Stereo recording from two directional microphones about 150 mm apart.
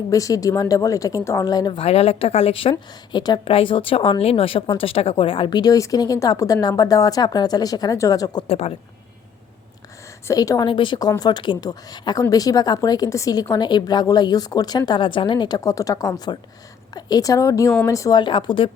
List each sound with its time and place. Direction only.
0.1 s a woman's voice: 20° left (ahead or behind)
8.4 s speech: 45° left (ahead or behind)
10.2 s a woman's voice: 20° left (ahead or behind)